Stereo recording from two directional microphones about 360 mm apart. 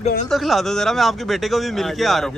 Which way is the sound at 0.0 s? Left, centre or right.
Centre.